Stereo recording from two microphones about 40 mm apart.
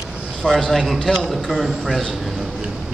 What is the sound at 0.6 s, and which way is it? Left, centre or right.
A man's voice, centre.